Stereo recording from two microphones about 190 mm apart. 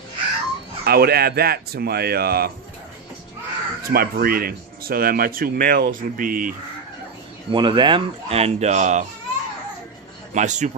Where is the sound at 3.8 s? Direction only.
50° right (ahead or behind).